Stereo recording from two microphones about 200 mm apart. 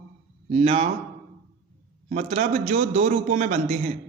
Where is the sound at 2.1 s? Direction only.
35° right (ahead or behind).